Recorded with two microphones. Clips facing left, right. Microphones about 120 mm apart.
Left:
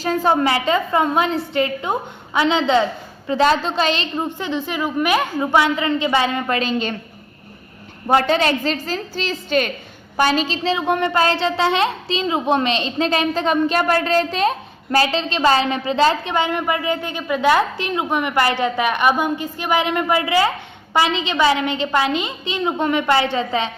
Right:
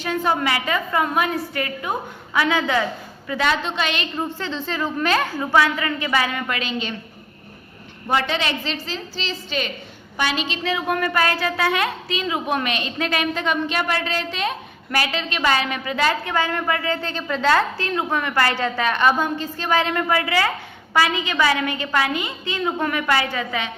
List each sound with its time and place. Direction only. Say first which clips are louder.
0.0 s a woman's voice: left 4 dB; 35° left (ahead or behind)
8.0 s a woman's voice: left 6 dB; 40° left (ahead or behind)
10.2 s a woman's voice: left 6 dB; 40° left (ahead or behind)